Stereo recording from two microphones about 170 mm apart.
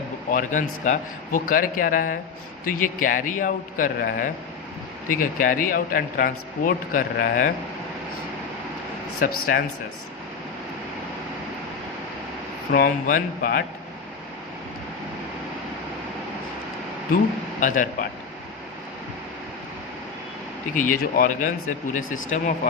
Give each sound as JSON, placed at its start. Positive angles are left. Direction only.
{"t": 0.3, "sound": "a man's voice", "side_deg": 50}
{"t": 9.2, "sound": "speech", "side_deg": 55}
{"t": 12.7, "sound": "speech", "side_deg": 55}
{"t": 17.6, "sound": "a man's voice", "side_deg": 50}
{"t": 20.7, "sound": "a man's voice", "side_deg": 55}